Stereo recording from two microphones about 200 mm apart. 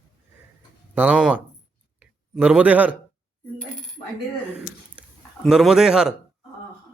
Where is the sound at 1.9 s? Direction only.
5° right (ahead or behind).